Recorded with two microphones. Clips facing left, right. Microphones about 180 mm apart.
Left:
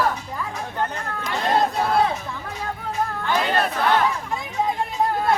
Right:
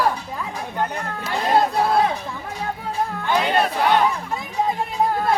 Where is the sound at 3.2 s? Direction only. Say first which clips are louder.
Right 3 dB; 15° right (ahead or behind).